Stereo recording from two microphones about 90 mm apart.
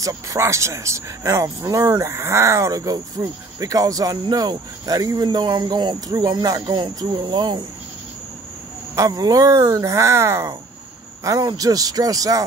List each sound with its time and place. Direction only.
0.0 s speech: 35° right (ahead or behind); by 7.6 s 55° right (ahead or behind)
8.9 s speech: 45° right (ahead or behind)